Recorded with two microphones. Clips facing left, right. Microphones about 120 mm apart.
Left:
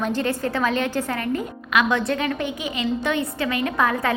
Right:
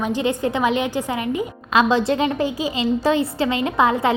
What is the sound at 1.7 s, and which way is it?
A woman's voice, 30° right (ahead or behind).